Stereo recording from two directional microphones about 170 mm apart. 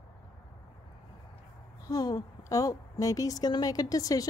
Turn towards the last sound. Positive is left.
turn(degrees=20)  # may be behind; listen again after turning